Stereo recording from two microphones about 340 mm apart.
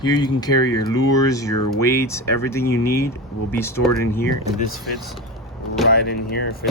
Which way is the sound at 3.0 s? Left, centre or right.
Centre.